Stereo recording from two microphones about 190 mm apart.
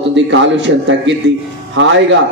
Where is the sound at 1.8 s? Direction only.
80° right.